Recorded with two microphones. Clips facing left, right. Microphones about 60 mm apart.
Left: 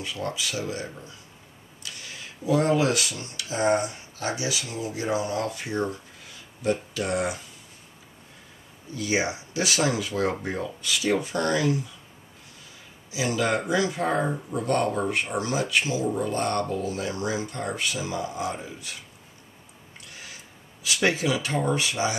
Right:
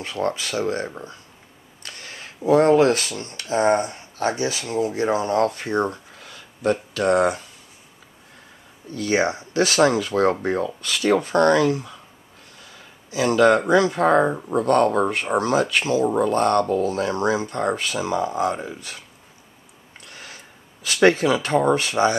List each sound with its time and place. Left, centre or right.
0.0 s speech: right
8.9 s speech: right
13.1 s speech: right
20.1 s a sound: right